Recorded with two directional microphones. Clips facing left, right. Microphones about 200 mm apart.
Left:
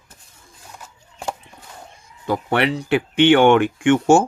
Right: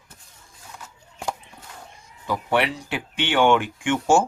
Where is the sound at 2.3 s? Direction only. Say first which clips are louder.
Left 3 dB; 60° left (ahead or behind).